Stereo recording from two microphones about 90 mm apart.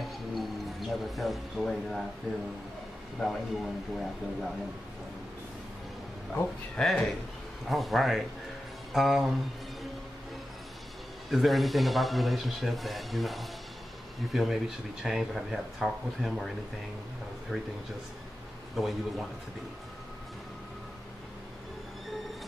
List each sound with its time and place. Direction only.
0.0 s speech: centre (ahead or behind)
3.2 s speech: centre (ahead or behind)
6.8 s speech: centre (ahead or behind)
11.2 s speech: centre (ahead or behind)
18.8 s speech: centre (ahead or behind)